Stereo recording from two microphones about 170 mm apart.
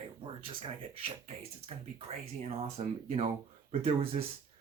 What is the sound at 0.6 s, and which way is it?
Speech, 35° right (ahead or behind).